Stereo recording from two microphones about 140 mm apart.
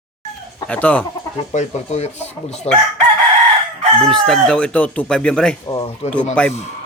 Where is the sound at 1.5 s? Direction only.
50° left (ahead or behind).